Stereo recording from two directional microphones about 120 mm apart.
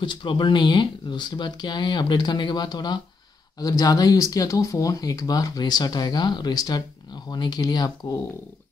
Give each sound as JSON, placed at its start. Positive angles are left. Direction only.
{"t": 0.0, "sound": "speech", "side_deg": 40}